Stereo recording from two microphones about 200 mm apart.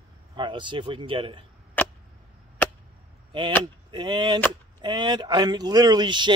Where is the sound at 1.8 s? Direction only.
10° left (ahead or behind).